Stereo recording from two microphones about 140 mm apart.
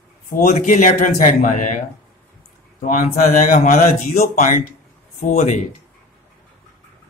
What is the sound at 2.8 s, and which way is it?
A man's voice, 70° left (ahead or behind).